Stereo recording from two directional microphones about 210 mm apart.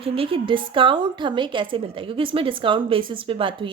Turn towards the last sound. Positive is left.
turn(degrees=-25)  # may be behind; listen again after turning